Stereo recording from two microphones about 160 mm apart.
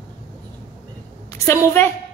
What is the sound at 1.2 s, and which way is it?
Speech, 15° left (ahead or behind).